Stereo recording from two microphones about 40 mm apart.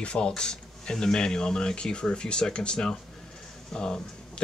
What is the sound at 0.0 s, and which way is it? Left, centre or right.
Speech, left.